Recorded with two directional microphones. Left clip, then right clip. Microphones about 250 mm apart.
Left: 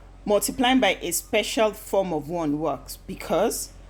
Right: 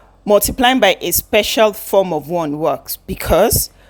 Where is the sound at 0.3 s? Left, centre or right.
Right.